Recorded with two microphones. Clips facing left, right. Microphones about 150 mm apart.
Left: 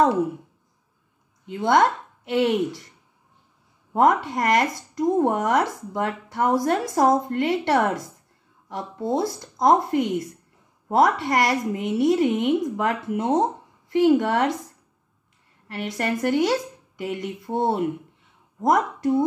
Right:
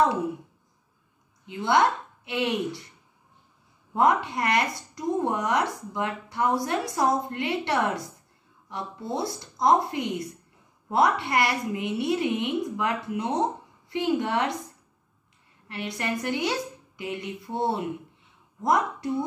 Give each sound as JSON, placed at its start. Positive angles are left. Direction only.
{"t": 1.4, "sound": "a woman's voice", "side_deg": 50}
{"t": 3.9, "sound": "speech", "side_deg": 50}
{"t": 15.7, "sound": "a woman's voice", "side_deg": 45}